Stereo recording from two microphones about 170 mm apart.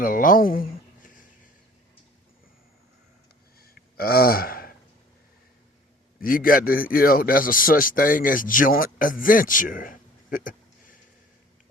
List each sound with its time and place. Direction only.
0.0 s a sound: 50° left (ahead or behind)
3.6 s gasp: 65° left (ahead or behind)
6.1 s a man's voice: 55° left (ahead or behind)